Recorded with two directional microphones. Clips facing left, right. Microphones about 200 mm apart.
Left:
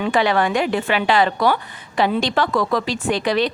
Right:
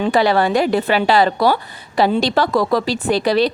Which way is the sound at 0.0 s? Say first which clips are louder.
Right 3 dB; 35° right (ahead or behind).